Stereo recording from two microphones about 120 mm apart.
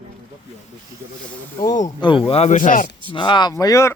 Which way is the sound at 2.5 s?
90° left.